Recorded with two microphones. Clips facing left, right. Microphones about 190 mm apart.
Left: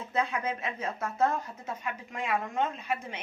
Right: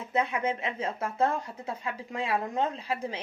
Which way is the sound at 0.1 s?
25° right (ahead or behind).